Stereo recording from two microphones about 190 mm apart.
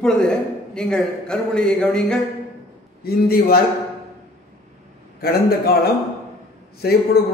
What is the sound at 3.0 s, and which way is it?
Speech, 55° left (ahead or behind).